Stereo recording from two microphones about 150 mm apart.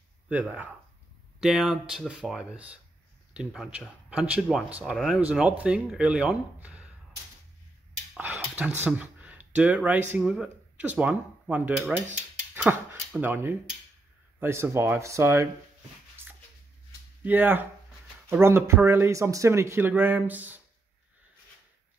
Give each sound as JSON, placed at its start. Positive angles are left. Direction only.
{"t": 0.3, "sound": "speech", "side_deg": -10}
{"t": 8.1, "sound": "a sound", "side_deg": -10}
{"t": 8.8, "sound": "speech", "side_deg": -10}
{"t": 17.2, "sound": "speech", "side_deg": -10}